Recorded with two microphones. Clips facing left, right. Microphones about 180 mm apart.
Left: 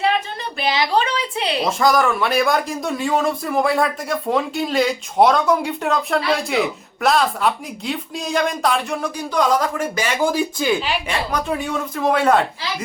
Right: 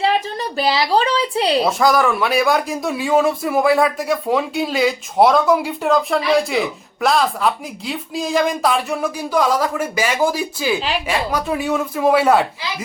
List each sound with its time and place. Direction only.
0.0 s a woman's voice: 35° right (ahead or behind)
1.8 s a man's voice: centre (ahead or behind)